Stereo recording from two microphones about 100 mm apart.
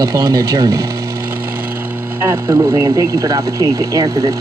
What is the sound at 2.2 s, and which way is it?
Speech, 30° right (ahead or behind).